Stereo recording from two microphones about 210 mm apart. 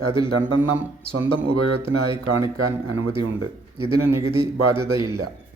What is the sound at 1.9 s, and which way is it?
Speech, 90° right.